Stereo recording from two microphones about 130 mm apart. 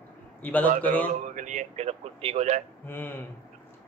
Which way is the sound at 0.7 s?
90° right.